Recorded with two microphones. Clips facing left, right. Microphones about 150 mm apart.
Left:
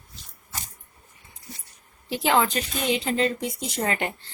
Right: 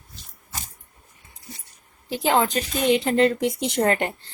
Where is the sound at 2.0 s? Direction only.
45° right (ahead or behind).